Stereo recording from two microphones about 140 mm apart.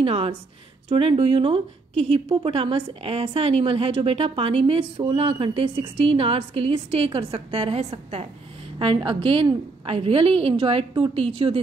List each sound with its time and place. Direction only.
0.0 s a woman's voice: 45° right (ahead or behind)